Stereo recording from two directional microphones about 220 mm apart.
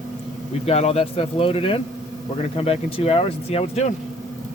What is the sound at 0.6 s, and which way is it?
Speech, 30° left (ahead or behind).